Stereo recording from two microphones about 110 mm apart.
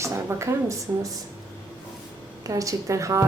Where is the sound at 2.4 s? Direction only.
30° right (ahead or behind).